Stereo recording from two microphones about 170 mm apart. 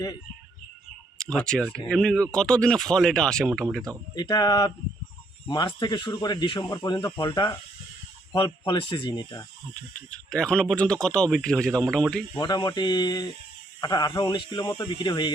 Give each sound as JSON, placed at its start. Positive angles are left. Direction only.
{"t": 1.2, "sound": "speech", "side_deg": 5}
{"t": 4.1, "sound": "speech", "side_deg": 25}
{"t": 10.1, "sound": "speech", "side_deg": 5}
{"t": 12.4, "sound": "speech", "side_deg": 25}